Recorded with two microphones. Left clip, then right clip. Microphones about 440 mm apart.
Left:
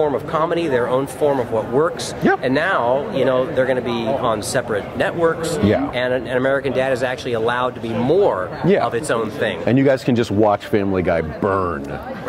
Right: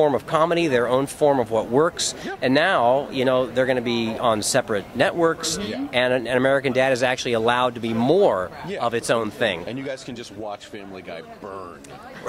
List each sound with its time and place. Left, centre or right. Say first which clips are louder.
0.0 s speech: even; right
9.7 s speech: left 15 dB; left